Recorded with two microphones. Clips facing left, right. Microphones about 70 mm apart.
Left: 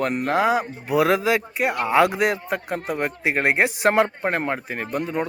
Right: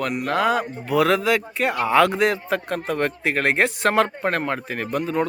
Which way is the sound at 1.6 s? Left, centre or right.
Centre.